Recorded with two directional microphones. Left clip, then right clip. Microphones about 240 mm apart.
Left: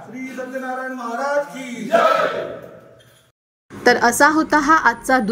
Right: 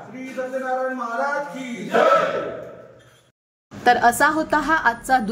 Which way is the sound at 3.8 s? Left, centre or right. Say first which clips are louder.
Left 2 dB; centre.